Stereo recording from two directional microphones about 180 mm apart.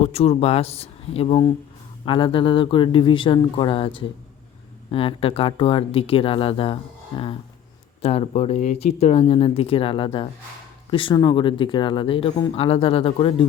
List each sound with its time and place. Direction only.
0.0 s speech: 35° left (ahead or behind)